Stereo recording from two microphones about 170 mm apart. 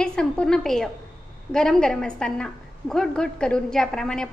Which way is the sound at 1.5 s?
5° left (ahead or behind).